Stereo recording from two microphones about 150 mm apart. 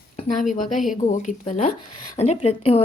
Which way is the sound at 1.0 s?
55° left (ahead or behind).